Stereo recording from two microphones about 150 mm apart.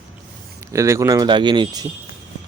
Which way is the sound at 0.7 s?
20° right (ahead or behind).